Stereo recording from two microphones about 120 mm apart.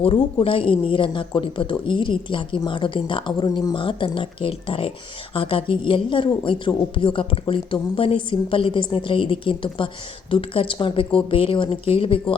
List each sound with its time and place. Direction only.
0.0 s speech: 50° left (ahead or behind)